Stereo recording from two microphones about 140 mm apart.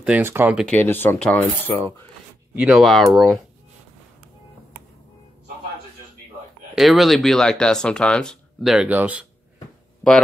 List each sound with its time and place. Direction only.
0.0 s speech: 15° right (ahead or behind)
0.7 s coin: 15° left (ahead or behind)
2.5 s speech: 5° right (ahead or behind)
6.7 s speech: centre (ahead or behind)